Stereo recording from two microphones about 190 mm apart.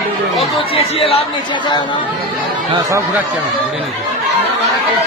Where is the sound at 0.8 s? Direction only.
30° left (ahead or behind).